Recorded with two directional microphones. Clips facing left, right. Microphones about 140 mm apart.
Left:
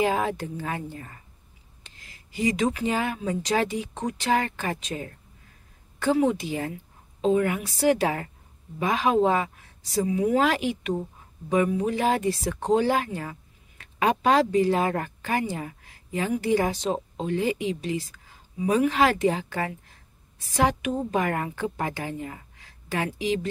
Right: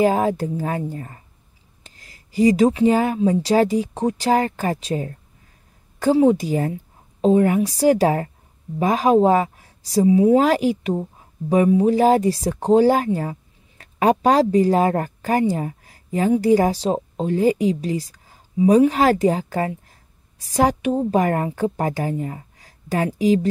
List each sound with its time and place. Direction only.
0.0 s a woman's voice: 40° right (ahead or behind)